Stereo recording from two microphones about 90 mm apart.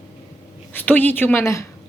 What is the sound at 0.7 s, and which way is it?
Speech, 20° left (ahead or behind).